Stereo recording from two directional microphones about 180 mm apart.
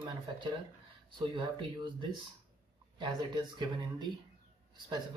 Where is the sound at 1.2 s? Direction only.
25° right (ahead or behind).